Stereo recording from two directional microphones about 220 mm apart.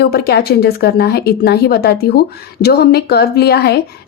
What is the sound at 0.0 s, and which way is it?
Speech, 45° left (ahead or behind).